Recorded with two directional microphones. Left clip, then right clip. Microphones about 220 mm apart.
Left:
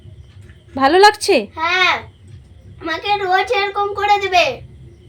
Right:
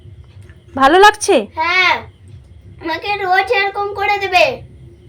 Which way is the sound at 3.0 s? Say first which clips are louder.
Right 1 dB; 10° left (ahead or behind).